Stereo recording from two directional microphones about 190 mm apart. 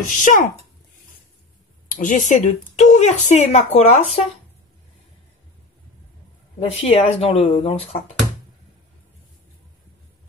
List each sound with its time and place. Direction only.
0.2 s speech: 45° left (ahead or behind)
1.9 s speech: 45° left (ahead or behind)
6.6 s speech: 35° left (ahead or behind)